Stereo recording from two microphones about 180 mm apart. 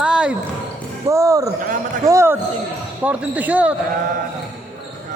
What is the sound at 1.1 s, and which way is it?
Speech, 15° right (ahead or behind).